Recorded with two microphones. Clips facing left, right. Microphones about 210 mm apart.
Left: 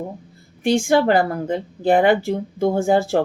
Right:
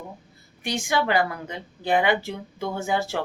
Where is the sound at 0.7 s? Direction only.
50° left (ahead or behind).